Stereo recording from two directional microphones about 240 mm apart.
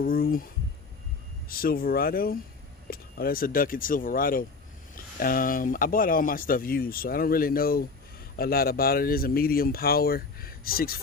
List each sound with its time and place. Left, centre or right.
0.0 s speech: left